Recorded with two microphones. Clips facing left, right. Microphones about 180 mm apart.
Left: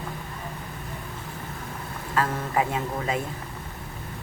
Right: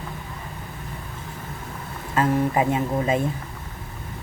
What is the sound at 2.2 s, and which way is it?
Speech, 20° right (ahead or behind).